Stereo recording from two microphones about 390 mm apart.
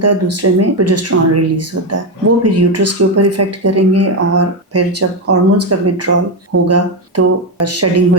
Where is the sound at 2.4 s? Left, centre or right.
Right.